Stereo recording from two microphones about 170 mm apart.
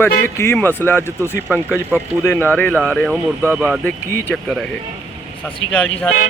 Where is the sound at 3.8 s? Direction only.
10° left (ahead or behind).